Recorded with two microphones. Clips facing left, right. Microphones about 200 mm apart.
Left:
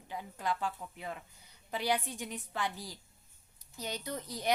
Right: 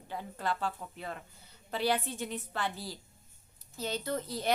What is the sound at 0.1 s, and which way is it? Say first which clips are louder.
A woman's voice: right 1 dB; 15° left (ahead or behind).